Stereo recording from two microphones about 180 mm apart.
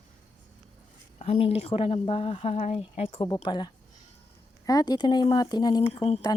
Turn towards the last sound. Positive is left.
turn(degrees=30)  # may be behind; listen again after turning